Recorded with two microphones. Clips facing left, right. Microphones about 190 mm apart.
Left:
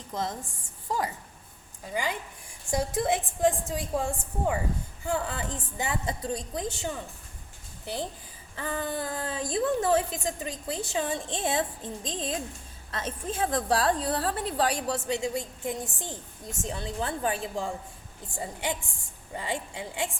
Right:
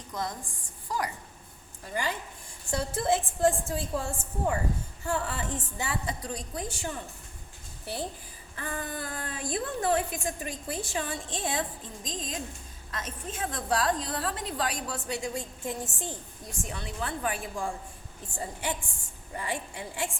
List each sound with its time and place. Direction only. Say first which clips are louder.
0.1 s a woman's voice: left 2 dB; 25° left (ahead or behind)
1.8 s a woman's voice: left 1 dB; 15° left (ahead or behind)
8.5 s a woman's voice: left 4 dB; 25° left (ahead or behind)